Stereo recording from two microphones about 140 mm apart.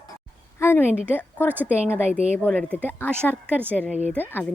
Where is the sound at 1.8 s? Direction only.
10° right (ahead or behind).